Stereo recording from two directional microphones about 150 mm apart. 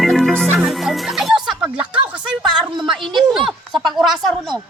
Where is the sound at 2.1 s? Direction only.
5° right (ahead or behind).